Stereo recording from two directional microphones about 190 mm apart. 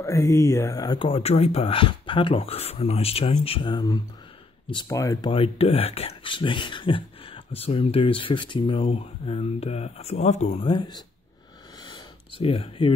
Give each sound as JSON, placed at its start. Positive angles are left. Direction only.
{"t": 0.0, "sound": "speech", "side_deg": 15}
{"t": 10.7, "sound": "speech", "side_deg": 25}
{"t": 11.8, "sound": "a sound", "side_deg": 25}